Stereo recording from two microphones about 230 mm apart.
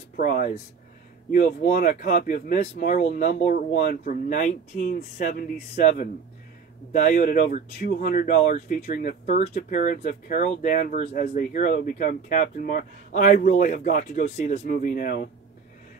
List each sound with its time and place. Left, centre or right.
0.1 s speech: left